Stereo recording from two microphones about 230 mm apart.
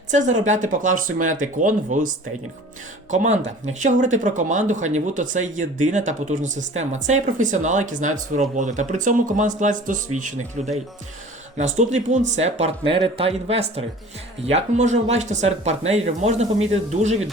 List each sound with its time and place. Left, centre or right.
0.1 s speech: right